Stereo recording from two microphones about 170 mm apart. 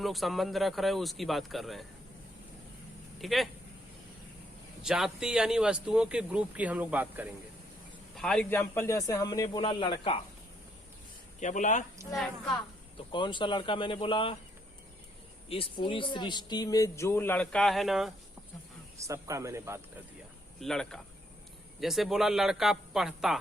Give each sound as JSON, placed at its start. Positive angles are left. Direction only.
{"t": 0.0, "sound": "speech", "side_deg": 0}
{"t": 3.2, "sound": "speech", "side_deg": 0}
{"t": 4.8, "sound": "speech", "side_deg": -5}
{"t": 8.1, "sound": "speech", "side_deg": 5}
{"t": 11.3, "sound": "speech", "side_deg": 45}
{"t": 13.1, "sound": "speech", "side_deg": 30}
{"t": 15.4, "sound": "speech", "side_deg": 30}
{"t": 18.9, "sound": "a man's voice", "side_deg": -20}
{"t": 20.6, "sound": "speech", "side_deg": 5}